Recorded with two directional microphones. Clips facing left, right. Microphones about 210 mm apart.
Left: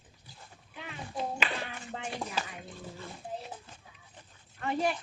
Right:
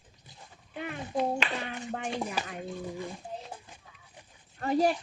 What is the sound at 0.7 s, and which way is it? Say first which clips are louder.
Speech: right 7 dB; 55° right (ahead or behind).